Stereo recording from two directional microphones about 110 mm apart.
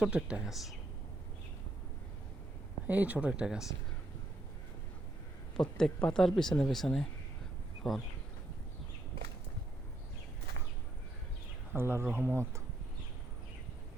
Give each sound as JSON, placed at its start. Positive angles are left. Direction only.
{"t": 0.0, "sound": "speech", "side_deg": -10}
{"t": 2.8, "sound": "speech", "side_deg": -15}
{"t": 5.5, "sound": "speech", "side_deg": 5}
{"t": 11.7, "sound": "speech", "side_deg": -20}